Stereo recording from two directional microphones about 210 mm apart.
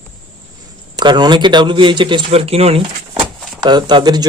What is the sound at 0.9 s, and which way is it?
A man's voice, 20° right (ahead or behind).